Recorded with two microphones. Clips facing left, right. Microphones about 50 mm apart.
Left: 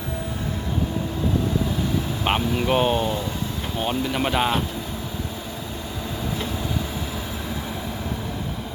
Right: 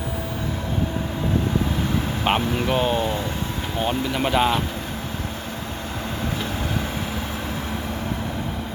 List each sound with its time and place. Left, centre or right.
2.2 s speech: centre
2.6 s speech: centre
3.8 s speech: centre